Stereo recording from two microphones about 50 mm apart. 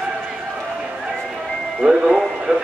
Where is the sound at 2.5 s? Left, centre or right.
Right.